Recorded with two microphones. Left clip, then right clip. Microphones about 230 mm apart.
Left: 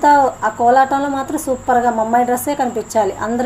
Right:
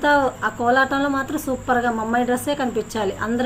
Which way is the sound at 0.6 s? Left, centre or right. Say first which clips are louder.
Left 6 dB; centre.